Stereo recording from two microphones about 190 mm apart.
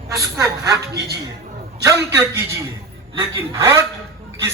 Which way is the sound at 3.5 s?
15° right (ahead or behind).